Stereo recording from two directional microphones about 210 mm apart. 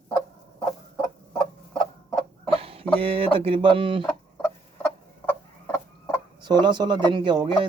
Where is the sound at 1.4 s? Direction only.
5° left (ahead or behind).